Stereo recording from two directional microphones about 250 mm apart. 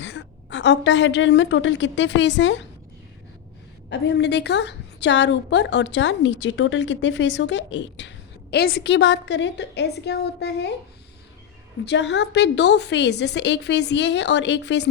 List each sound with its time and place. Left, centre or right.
0.0 s a woman's voice: left
3.8 s a woman's voice: left
11.9 s a woman's voice: left